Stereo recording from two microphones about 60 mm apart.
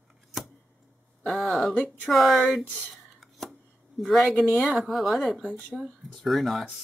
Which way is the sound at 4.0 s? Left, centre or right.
Centre.